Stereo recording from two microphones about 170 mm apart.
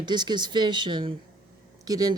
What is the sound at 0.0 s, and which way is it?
Speech, 25° right (ahead or behind).